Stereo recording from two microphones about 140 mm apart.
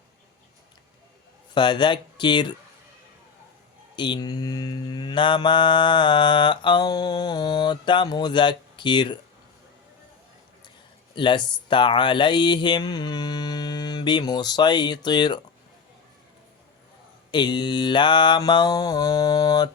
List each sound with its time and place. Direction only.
1.5 s mantra: 35° left (ahead or behind)
3.9 s mantra: 35° left (ahead or behind)
11.1 s mantra: 35° left (ahead or behind)
17.3 s mantra: 30° left (ahead or behind)